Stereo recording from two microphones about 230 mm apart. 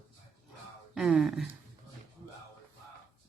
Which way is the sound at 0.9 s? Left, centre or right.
Centre.